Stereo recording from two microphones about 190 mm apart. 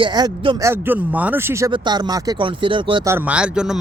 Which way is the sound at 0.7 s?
10° right (ahead or behind).